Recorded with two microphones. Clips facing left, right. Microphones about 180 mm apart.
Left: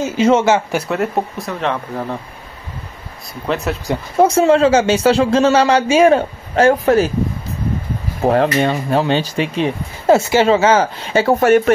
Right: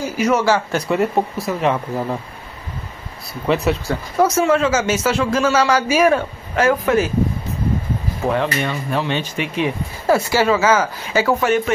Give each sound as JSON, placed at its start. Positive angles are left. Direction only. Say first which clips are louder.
{"t": 0.0, "sound": "speech", "louder": "left 4 dB", "side_deg": 25}
{"t": 0.8, "sound": "speech", "louder": "right 1 dB", "side_deg": 0}
{"t": 3.4, "sound": "speech", "louder": "right 2 dB", "side_deg": 0}
{"t": 3.8, "sound": "speech", "louder": "left 3 dB", "side_deg": 20}
{"t": 4.3, "sound": "speech", "louder": "left 7 dB", "side_deg": 30}
{"t": 8.2, "sound": "speech", "louder": "left 6 dB", "side_deg": 35}
{"t": 11.4, "sound": "speech", "louder": "left 6 dB", "side_deg": 50}